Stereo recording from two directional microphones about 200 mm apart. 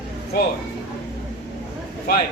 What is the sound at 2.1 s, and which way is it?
Speech, 50° left (ahead or behind).